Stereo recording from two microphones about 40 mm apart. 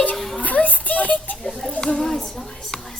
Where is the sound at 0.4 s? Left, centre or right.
Left.